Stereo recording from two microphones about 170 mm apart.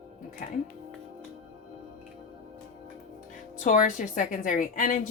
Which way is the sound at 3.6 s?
50° left (ahead or behind).